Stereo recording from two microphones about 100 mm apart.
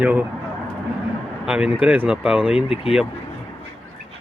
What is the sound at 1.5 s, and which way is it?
Speech, 10° right (ahead or behind).